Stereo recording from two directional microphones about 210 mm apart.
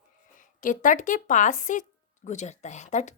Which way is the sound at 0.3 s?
40° left (ahead or behind).